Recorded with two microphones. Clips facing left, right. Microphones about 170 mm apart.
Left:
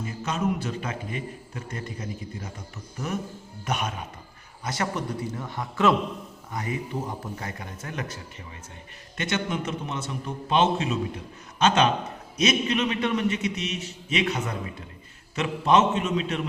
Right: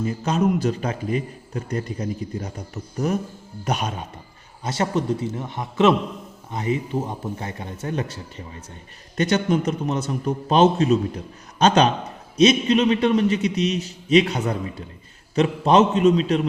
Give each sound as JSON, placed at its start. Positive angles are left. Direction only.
{"t": 0.0, "sound": "a man's voice", "side_deg": -35}